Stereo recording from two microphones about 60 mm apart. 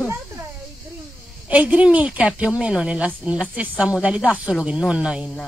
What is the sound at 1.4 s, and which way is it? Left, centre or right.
A woman's voice, right.